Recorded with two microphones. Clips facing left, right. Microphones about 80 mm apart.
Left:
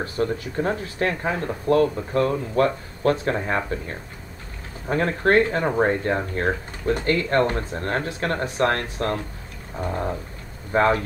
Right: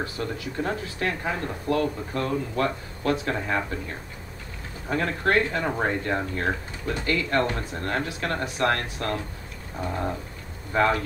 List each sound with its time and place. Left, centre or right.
0.0 s speech: left